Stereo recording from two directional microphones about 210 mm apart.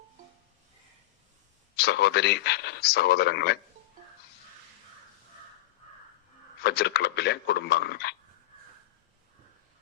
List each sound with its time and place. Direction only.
1.7 s speech: 50° left (ahead or behind)
6.6 s speech: 50° left (ahead or behind)